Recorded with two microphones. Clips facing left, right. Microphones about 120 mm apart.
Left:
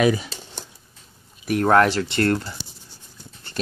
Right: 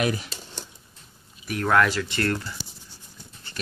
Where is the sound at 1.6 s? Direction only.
35° left (ahead or behind).